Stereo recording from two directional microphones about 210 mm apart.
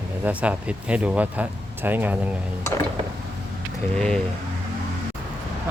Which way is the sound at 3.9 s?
5° left (ahead or behind).